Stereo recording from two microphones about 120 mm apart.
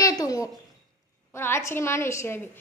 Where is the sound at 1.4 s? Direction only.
20° left (ahead or behind).